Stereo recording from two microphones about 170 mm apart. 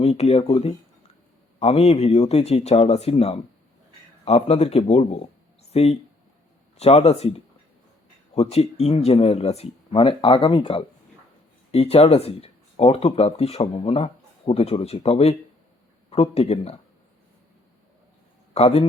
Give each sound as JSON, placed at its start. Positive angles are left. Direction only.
{"t": 0.0, "sound": "speech", "side_deg": 40}
{"t": 18.5, "sound": "speech", "side_deg": 35}